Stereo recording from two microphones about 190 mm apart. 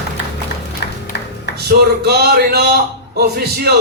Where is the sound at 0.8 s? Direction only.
60° left (ahead or behind).